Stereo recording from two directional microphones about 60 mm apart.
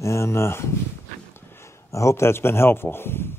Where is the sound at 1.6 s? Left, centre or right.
Left.